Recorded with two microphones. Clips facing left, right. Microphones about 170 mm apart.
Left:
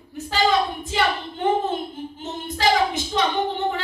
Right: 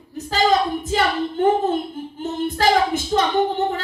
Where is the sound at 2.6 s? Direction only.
50° right (ahead or behind).